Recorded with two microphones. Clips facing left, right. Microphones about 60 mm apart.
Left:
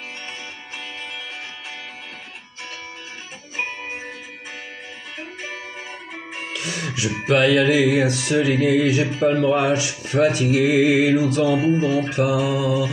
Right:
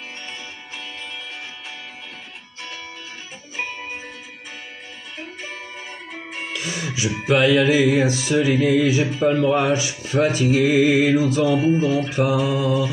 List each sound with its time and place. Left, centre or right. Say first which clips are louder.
3.5 s music: left 1 dB; left
5.4 s music: left 1 dB; left
6.5 s music: even; centre